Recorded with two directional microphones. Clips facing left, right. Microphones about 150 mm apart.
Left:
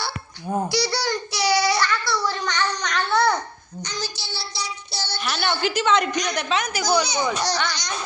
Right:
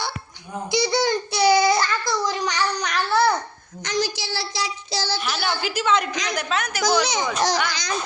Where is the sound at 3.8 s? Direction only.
90° right.